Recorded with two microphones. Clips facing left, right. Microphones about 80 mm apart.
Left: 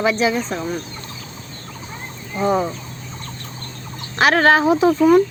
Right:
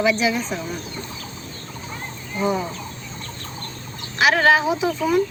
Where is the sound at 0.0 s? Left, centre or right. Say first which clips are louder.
Left 2 dB; left.